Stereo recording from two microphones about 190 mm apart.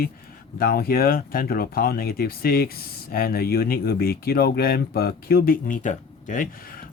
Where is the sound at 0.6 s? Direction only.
50° left (ahead or behind).